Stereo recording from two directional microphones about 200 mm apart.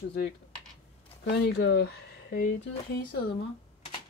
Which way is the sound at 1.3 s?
55° left (ahead or behind).